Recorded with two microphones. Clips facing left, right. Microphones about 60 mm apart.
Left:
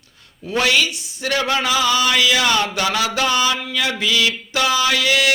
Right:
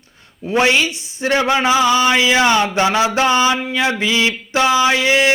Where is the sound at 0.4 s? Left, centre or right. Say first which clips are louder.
Right 3 dB; right.